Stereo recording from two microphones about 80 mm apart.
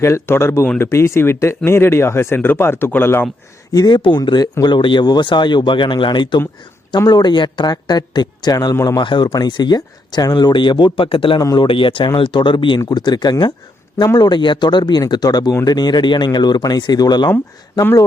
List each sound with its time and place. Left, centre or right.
0.0 s speech: left
3.7 s speech: left
3.9 s speech: left
7.1 s speech: left
8.7 s speech: left
9.0 s speech: left
12.9 s speech: left